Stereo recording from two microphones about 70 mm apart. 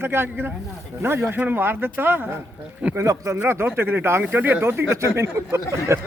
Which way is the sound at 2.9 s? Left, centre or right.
Right.